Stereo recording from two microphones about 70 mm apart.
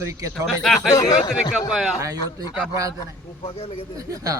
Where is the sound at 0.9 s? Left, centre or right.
Left.